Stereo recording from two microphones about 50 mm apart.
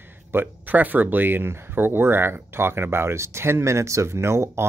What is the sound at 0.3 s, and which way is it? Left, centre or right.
Speech, right.